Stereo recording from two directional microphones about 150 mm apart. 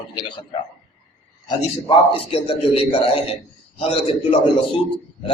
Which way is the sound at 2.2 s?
40° left (ahead or behind).